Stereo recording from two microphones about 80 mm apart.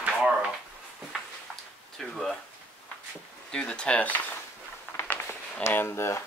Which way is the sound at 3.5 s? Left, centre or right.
Centre.